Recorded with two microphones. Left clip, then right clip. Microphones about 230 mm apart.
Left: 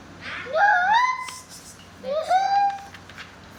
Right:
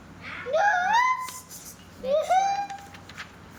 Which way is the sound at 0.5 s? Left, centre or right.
Centre.